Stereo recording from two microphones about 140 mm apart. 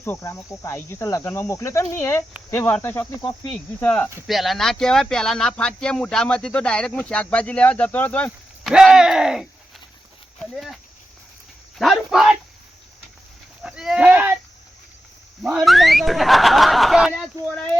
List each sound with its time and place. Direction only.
0.0 s cricket: 20° left (ahead or behind)
2.5 s speech: 15° left (ahead or behind)
4.3 s speech: centre (ahead or behind)
8.6 s speech: 5° right (ahead or behind)
11.8 s speech: centre (ahead or behind)
13.6 s speech: 5° right (ahead or behind)
15.4 s speech: 5° right (ahead or behind)